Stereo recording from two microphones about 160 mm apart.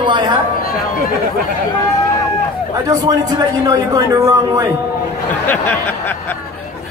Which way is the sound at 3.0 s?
25° right (ahead or behind).